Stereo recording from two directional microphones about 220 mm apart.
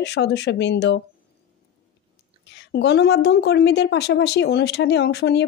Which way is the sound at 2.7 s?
50° left (ahead or behind).